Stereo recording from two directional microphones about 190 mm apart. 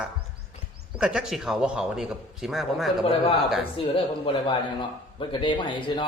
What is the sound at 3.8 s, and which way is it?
Speech, 30° left (ahead or behind).